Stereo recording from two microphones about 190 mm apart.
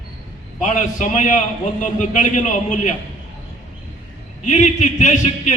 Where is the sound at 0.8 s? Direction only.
40° left (ahead or behind).